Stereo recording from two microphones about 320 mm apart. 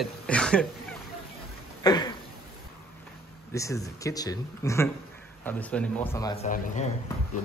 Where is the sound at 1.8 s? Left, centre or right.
Centre.